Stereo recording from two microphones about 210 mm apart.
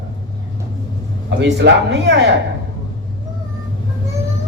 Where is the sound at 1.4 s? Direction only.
55° right (ahead or behind).